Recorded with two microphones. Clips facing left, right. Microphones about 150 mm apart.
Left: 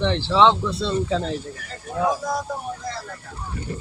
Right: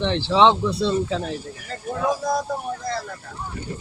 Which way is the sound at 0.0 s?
15° right (ahead or behind).